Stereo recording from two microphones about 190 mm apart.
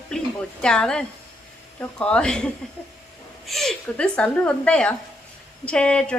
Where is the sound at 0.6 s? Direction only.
5° left (ahead or behind).